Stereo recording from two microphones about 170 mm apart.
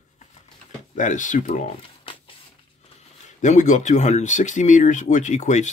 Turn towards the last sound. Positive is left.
turn(degrees=45)  # may be behind; listen again after turning